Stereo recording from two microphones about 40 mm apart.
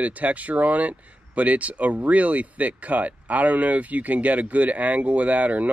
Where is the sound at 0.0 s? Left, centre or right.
Right.